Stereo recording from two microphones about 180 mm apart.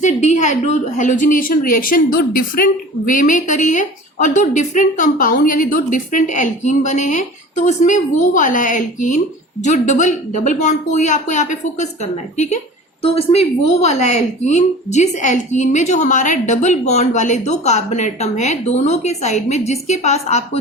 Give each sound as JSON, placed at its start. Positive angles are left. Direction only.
{"t": 0.0, "sound": "a woman's voice", "side_deg": 40}
{"t": 13.0, "sound": "a woman's voice", "side_deg": 35}